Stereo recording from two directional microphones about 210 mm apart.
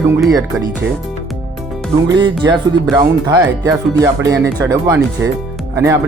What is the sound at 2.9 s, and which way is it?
Speech, 15° right (ahead or behind).